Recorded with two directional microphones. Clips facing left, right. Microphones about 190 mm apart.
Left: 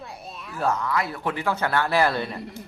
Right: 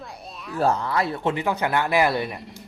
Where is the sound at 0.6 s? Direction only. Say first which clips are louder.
Right 3 dB; 30° right (ahead or behind); by 2.4 s 15° right (ahead or behind).